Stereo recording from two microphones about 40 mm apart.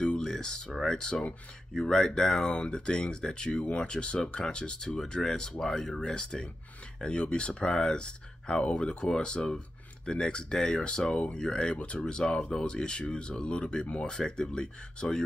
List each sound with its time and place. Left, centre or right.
0.2 s speech: centre
2.5 s speech: left
12.0 s speech: centre